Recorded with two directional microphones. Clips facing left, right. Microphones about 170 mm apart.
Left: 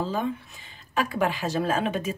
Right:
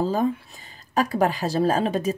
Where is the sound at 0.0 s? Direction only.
40° right (ahead or behind).